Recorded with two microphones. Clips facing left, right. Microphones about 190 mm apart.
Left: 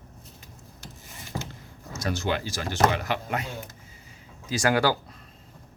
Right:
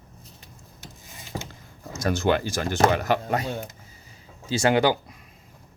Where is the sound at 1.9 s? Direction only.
50° right (ahead or behind).